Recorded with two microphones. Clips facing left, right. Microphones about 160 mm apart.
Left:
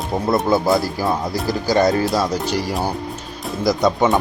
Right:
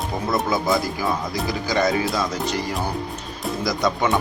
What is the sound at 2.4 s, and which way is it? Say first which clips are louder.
Speech: left 3 dB; centre (ahead or behind).